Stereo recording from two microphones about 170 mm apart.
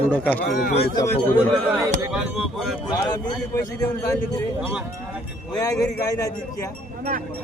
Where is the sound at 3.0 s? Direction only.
20° left (ahead or behind).